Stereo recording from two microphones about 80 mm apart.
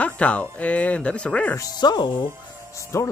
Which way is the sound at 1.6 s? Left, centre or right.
Left.